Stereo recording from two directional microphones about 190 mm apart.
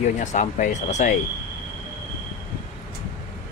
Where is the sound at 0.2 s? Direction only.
40° left (ahead or behind).